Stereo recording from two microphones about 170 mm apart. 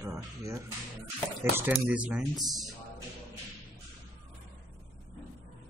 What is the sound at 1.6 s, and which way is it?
Speech, 5° right (ahead or behind).